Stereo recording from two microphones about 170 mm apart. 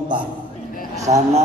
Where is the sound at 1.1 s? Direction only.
45° right (ahead or behind).